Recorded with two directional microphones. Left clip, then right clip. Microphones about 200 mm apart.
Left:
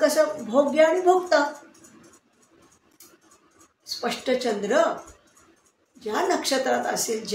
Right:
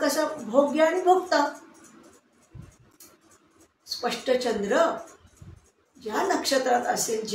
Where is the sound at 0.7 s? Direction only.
35° left (ahead or behind).